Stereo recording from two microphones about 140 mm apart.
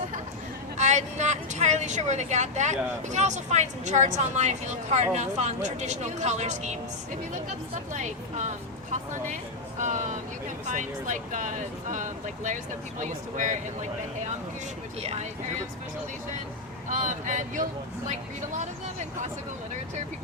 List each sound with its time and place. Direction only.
0.8 s speech: 55° right (ahead or behind)
7.9 s speech: 60° right (ahead or behind)
15.0 s speech: 45° right (ahead or behind)
16.9 s speech: 65° right (ahead or behind)